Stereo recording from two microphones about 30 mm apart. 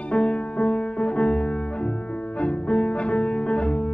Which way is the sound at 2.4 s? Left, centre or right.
Left.